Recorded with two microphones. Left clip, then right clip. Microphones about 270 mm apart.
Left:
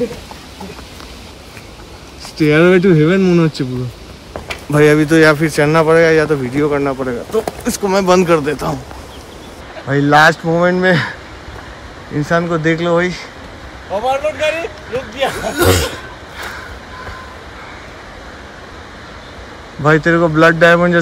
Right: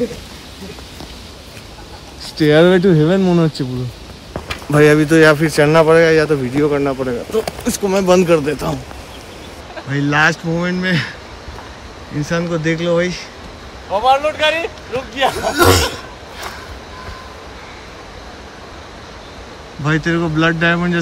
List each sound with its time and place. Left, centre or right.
2.3 s speech: centre
9.8 s speech: centre
12.2 s speech: centre
19.8 s speech: centre